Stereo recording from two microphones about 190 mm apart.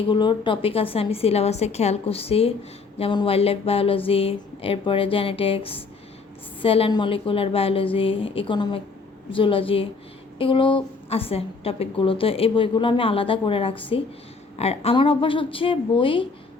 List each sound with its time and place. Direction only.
0.1 s a woman's voice: 25° left (ahead or behind)